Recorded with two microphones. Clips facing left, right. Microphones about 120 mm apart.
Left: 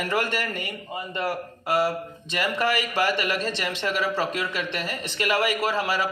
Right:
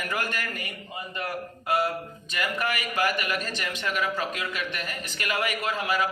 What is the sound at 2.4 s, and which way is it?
Speech, 30° left (ahead or behind).